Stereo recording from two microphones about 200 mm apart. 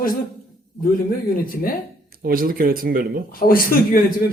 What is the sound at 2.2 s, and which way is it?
Speech, 45° right (ahead or behind).